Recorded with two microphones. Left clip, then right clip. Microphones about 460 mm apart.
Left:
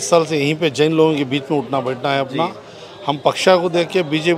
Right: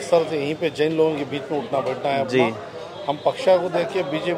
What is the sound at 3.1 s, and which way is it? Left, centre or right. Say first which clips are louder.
A man's voice: left 4 dB; left.